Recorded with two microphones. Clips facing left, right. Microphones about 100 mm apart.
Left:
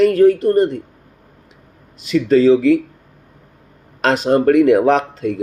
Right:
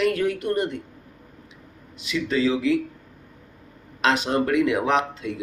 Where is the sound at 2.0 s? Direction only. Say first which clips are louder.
Left 11 dB; 40° left (ahead or behind).